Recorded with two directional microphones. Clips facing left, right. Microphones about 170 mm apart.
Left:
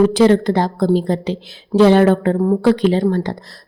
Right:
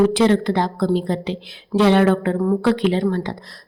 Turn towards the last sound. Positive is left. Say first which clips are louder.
# left 3 dB
turn(degrees=40)  # may be behind; listen again after turning